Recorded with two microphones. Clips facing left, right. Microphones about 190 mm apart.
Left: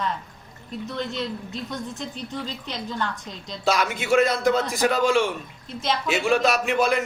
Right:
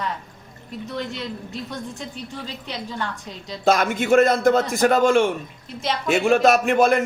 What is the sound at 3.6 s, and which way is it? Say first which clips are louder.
A man's voice: right 4 dB; 50° right (ahead or behind).